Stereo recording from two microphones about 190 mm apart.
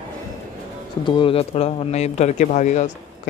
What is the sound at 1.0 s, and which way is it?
Speech, 25° left (ahead or behind).